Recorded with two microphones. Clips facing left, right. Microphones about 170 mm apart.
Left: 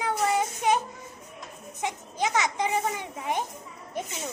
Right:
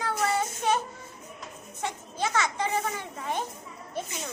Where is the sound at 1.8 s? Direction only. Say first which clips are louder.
Left 2 dB; 15° left (ahead or behind).